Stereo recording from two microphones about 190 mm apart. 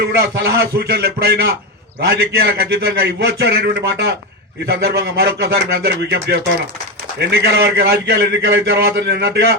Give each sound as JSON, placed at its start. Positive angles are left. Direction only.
{"t": 0.0, "sound": "a man's voice", "side_deg": -55}